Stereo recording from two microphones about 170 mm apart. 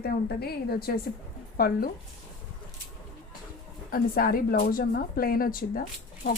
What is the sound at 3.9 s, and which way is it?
A woman's voice, 60° left (ahead or behind).